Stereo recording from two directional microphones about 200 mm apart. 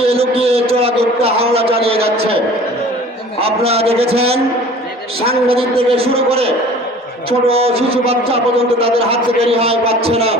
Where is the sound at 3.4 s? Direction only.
30° right (ahead or behind).